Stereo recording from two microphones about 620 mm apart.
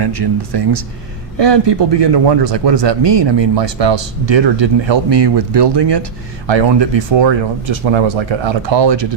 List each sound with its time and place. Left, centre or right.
0.0 s a man's voice: right